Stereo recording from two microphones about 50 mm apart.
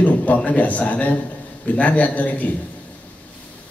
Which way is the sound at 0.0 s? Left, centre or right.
Left.